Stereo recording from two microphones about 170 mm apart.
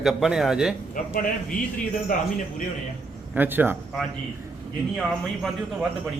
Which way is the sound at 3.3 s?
10° right (ahead or behind).